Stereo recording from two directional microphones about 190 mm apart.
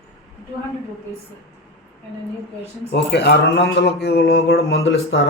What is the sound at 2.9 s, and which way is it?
A man's voice, 60° left (ahead or behind).